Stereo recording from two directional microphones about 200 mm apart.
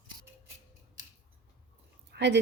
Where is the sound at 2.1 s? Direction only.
60° right (ahead or behind).